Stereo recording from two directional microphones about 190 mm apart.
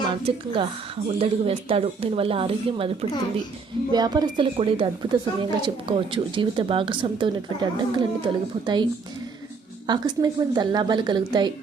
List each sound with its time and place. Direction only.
0.3 s speech: 25° right (ahead or behind)